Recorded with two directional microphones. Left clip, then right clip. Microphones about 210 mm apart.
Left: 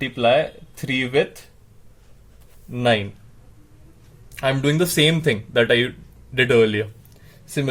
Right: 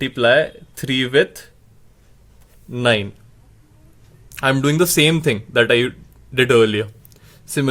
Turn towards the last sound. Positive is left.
turn(degrees=-40)  # may be behind; listen again after turning